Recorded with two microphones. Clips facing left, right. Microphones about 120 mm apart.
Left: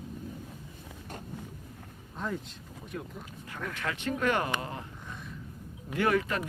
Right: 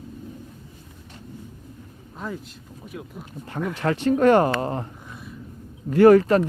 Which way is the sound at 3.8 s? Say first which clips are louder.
Right 12 dB; 35° right (ahead or behind).